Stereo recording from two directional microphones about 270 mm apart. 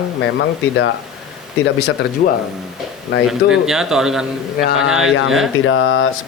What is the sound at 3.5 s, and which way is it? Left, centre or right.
A man's voice, centre.